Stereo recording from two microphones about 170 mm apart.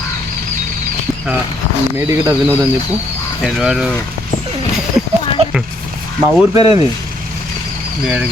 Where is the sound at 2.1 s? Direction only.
15° right (ahead or behind).